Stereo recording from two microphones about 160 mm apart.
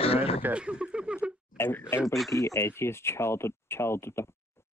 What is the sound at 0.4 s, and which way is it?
Speech, 10° right (ahead or behind).